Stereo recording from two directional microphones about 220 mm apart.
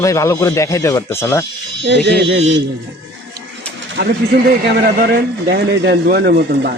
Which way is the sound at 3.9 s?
45° right (ahead or behind).